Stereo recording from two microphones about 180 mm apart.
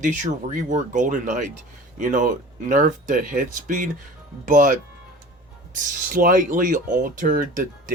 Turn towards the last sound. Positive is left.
turn(degrees=-50)  # may be behind; listen again after turning